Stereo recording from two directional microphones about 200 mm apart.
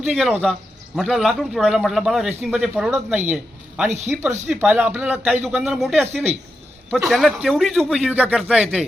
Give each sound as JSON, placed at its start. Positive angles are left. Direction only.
{"t": 0.0, "sound": "a man's voice", "side_deg": -5}
{"t": 3.8, "sound": "speech", "side_deg": -35}
{"t": 4.4, "sound": "speech", "side_deg": -10}